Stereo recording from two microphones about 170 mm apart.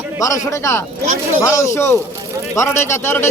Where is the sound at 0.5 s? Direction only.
15° left (ahead or behind).